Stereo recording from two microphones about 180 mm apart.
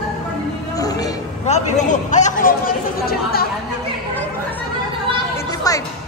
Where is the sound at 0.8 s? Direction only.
20° left (ahead or behind).